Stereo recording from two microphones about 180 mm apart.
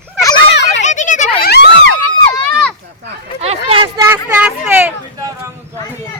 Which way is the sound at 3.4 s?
35° right (ahead or behind).